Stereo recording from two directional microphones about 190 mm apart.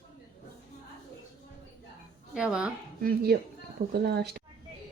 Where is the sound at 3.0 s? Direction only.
55° right (ahead or behind).